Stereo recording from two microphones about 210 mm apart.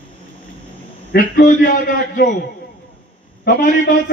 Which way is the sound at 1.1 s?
45° left (ahead or behind).